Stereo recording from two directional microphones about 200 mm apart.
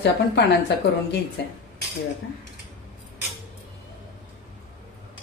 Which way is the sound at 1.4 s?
60° left (ahead or behind).